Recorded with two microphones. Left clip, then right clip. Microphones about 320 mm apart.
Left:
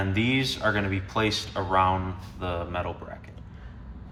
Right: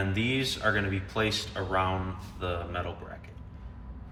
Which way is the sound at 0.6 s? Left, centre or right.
Left.